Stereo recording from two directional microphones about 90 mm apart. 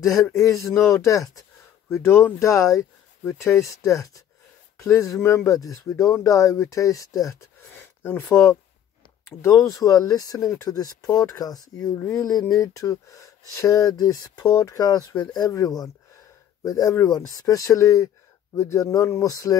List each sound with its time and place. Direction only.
0.0 s speech: 35° left (ahead or behind)
1.9 s speech: 30° left (ahead or behind)
7.6 s a sound: 20° left (ahead or behind)
9.3 s speech: 30° left (ahead or behind)
12.4 s speech: 30° left (ahead or behind)